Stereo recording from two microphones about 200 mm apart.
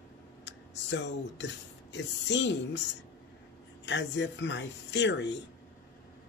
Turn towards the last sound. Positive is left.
turn(degrees=60)  # may be behind; listen again after turning